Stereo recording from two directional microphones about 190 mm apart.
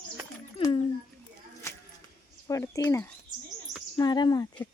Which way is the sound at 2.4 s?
15° left (ahead or behind).